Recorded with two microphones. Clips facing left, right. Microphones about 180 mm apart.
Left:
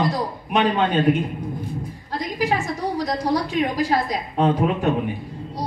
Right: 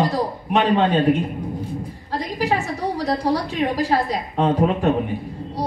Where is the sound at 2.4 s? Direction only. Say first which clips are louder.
Even; 35° right (ahead or behind).